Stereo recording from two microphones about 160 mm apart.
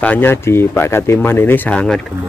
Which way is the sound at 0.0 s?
10° left (ahead or behind).